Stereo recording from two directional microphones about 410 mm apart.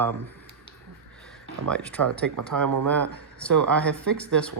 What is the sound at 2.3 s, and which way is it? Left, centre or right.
Speech, right.